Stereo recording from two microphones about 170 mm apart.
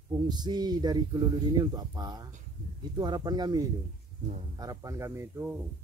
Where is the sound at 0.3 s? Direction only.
25° right (ahead or behind).